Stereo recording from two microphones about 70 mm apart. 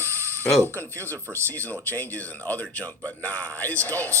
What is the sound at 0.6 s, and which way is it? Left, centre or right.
Speech, left.